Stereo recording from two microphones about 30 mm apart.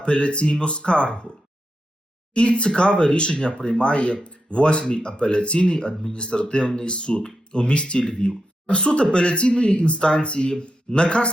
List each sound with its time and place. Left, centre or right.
0.0 s speech: left
2.3 s speech: left